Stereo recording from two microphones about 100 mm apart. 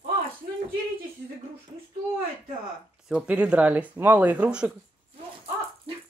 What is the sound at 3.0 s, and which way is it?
Speech, 10° right (ahead or behind).